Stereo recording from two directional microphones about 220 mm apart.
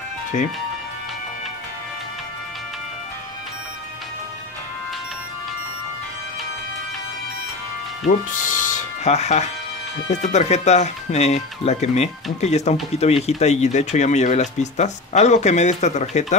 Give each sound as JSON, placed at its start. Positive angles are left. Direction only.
{"t": 0.3, "sound": "speech", "side_deg": 35}
{"t": 8.0, "sound": "speech", "side_deg": 35}